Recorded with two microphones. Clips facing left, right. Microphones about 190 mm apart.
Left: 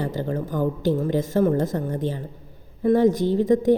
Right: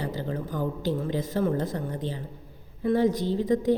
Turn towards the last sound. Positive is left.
turn(degrees=45)  # may be behind; listen again after turning